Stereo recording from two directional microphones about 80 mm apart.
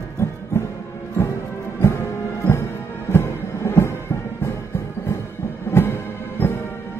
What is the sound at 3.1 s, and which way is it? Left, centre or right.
Music, left.